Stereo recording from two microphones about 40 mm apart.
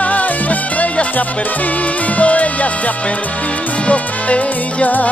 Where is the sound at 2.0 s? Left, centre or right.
Left.